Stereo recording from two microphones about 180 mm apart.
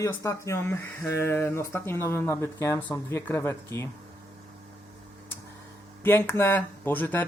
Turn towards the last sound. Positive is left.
turn(degrees=10)  # may be behind; listen again after turning